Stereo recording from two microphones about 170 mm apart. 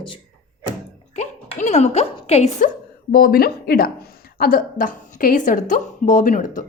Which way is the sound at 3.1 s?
60° left (ahead or behind).